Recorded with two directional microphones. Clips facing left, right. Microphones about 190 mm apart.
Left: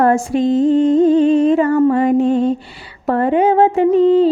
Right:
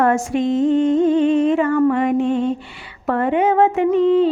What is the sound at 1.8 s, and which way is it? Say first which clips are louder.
Mantra: left 3 dB; 35° left (ahead or behind).